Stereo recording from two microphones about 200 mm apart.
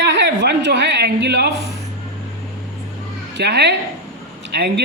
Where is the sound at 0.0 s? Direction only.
60° right (ahead or behind).